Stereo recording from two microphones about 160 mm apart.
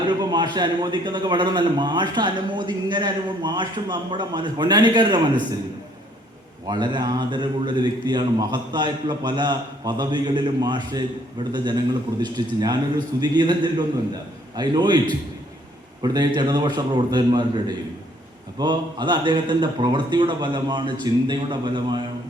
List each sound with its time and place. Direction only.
0.2 s a man's voice: 25° right (ahead or behind)
6.7 s a man's voice: 30° right (ahead or behind)